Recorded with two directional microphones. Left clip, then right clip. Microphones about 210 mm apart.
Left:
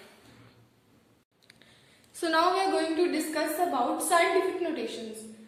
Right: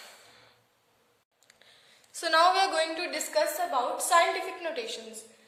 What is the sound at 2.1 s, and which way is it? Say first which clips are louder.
Speech: right 2 dB; 30° right (ahead or behind).